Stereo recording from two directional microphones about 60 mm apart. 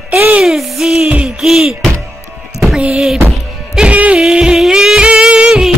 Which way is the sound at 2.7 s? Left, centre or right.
Centre.